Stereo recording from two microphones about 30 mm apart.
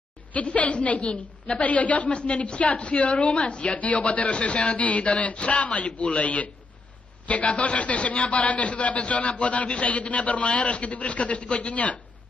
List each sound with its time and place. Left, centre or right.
0.3 s a woman's voice: left